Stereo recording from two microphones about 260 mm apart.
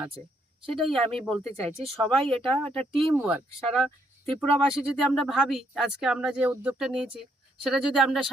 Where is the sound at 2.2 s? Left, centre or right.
Right.